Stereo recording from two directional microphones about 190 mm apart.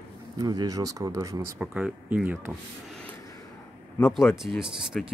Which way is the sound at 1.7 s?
5° right (ahead or behind).